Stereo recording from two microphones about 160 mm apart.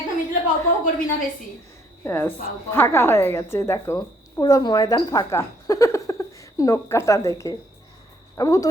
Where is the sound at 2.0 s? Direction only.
15° left (ahead or behind).